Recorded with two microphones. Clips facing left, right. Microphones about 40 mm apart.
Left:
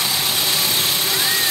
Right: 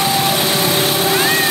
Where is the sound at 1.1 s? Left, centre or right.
Right.